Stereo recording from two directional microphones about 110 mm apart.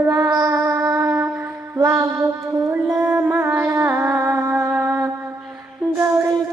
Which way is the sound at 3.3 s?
20° right (ahead or behind).